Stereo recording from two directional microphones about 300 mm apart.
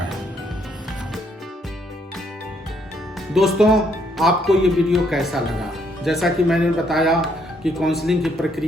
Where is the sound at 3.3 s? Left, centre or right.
Centre.